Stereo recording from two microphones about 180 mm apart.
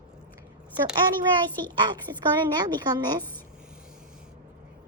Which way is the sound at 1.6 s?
25° right (ahead or behind).